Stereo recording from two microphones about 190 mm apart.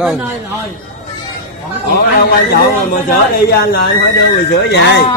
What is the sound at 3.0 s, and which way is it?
Speech, 60° left (ahead or behind).